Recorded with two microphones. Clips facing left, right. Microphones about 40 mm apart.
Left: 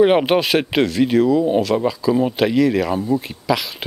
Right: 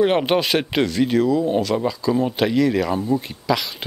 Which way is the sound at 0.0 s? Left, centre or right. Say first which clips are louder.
Left 3 dB; centre.